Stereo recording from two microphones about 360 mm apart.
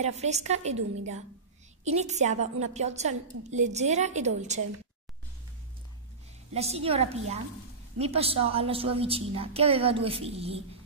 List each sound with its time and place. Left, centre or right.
0.0 s a woman's voice: centre
1.9 s a woman's voice: centre
6.5 s speech: centre